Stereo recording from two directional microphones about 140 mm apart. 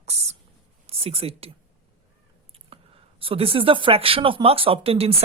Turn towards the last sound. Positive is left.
turn(degrees=-45)  # may be behind; listen again after turning